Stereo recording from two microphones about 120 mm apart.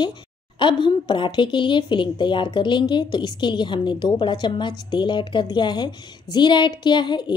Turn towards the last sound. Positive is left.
turn(degrees=40)  # may be behind; listen again after turning